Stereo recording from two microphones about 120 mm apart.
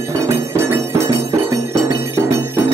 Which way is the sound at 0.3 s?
25° right (ahead or behind).